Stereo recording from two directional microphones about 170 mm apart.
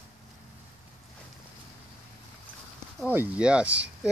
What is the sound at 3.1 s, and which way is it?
Speech, 10° right (ahead or behind).